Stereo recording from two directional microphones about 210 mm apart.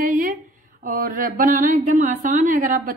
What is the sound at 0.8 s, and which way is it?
A woman's voice, 40° right (ahead or behind).